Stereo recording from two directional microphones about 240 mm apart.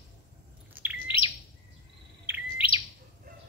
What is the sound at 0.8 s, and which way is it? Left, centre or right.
Bird, centre.